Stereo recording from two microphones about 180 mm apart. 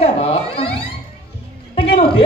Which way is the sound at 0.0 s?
35° left (ahead or behind).